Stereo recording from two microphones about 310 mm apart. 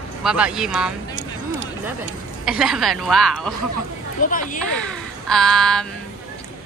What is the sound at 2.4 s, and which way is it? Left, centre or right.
A woman's voice, centre.